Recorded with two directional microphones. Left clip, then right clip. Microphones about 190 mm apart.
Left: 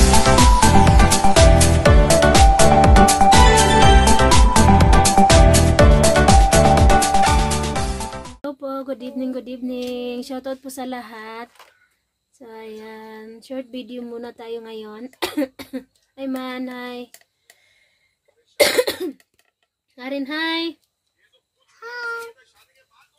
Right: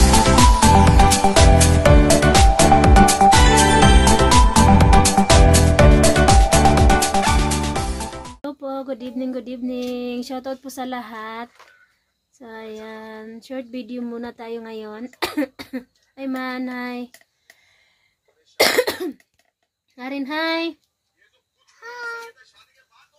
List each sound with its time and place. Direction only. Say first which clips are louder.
0.1 s music: even; centre (ahead or behind)
12.4 s speech: right 1 dB; 5° right (ahead or behind)
18.6 s cough: left 1 dB; 20° right (ahead or behind)
20.0 s speech: even; 20° right (ahead or behind)
21.8 s a sound: left 3 dB; centre (ahead or behind)